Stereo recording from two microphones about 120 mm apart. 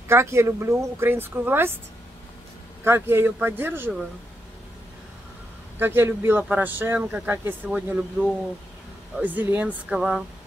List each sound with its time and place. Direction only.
0.1 s speech: 20° right (ahead or behind)
2.8 s speech: 20° right (ahead or behind)
5.8 s speech: 20° right (ahead or behind)
9.9 s speech: 5° right (ahead or behind)